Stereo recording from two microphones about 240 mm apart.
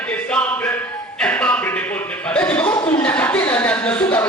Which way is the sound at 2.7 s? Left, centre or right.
Left.